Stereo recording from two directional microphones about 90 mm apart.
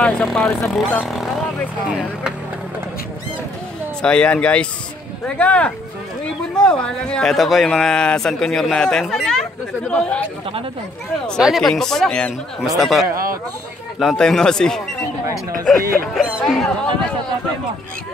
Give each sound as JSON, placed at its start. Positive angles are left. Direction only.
{"t": 0.0, "sound": "a man's voice", "side_deg": 10}
{"t": 1.0, "sound": "vehicle", "side_deg": 0}
{"t": 1.9, "sound": "speech", "side_deg": -10}
{"t": 4.0, "sound": "speech", "side_deg": 10}
{"t": 7.3, "sound": "a man's voice", "side_deg": 0}
{"t": 11.4, "sound": "a man's voice", "side_deg": 0}